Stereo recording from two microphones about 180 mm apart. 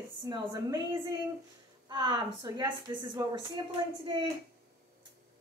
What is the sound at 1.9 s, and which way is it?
A woman's voice, 25° right (ahead or behind).